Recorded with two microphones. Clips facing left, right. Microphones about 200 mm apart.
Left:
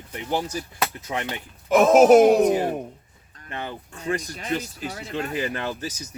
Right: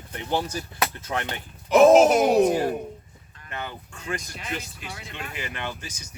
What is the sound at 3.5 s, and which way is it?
Speech, 30° left (ahead or behind).